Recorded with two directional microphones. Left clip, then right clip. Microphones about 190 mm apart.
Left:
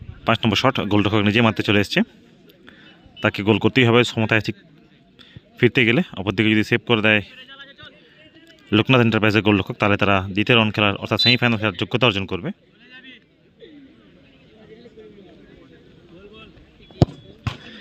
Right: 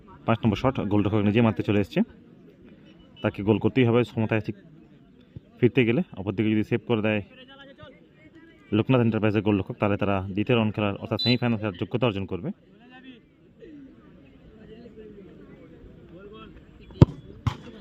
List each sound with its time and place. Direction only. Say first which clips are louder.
0.3 s speech: left 7 dB; 5° left (ahead or behind)
3.2 s speech: left 6 dB; 5° left (ahead or behind)
5.5 s speech: left 6 dB; 5° left (ahead or behind)
7.3 s a sound: left 6 dB; 50° right (ahead or behind)
8.7 s speech: left 7 dB; 10° left (ahead or behind)